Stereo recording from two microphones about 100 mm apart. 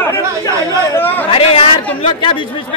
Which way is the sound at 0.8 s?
20° left (ahead or behind).